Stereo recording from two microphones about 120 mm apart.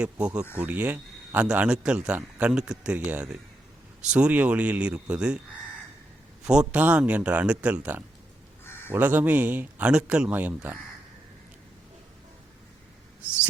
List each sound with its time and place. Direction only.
0.0 s speech: 10° right (ahead or behind)
6.4 s speech: 5° right (ahead or behind)
8.6 s a sound: 20° left (ahead or behind)
8.9 s speech: 15° right (ahead or behind)